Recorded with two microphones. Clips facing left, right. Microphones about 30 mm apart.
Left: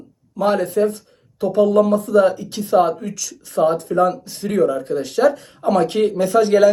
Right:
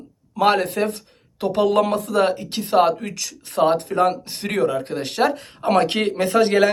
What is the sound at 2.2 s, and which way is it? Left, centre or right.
Speech, right.